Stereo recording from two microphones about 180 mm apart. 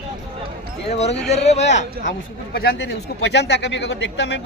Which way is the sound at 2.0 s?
60° left (ahead or behind).